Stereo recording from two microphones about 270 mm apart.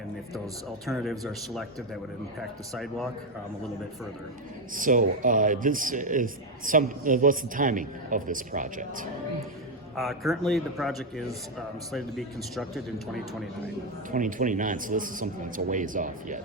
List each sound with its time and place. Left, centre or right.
0.9 s speech: centre
2.7 s speech: centre
4.7 s a man's voice: right
9.9 s speech: centre
14.1 s a man's voice: right